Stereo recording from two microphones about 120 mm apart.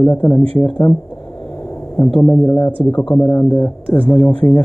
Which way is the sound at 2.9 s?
40° left (ahead or behind).